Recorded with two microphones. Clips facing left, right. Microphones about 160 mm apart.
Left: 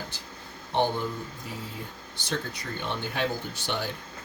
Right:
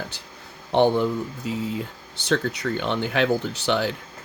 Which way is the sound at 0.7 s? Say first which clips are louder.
Right 8 dB; 80° right.